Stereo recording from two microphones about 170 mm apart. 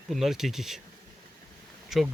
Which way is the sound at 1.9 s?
Centre (ahead or behind).